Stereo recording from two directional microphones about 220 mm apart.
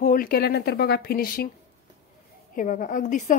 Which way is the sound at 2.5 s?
40° left (ahead or behind).